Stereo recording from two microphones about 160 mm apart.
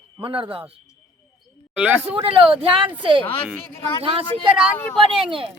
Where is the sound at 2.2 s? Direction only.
35° right (ahead or behind).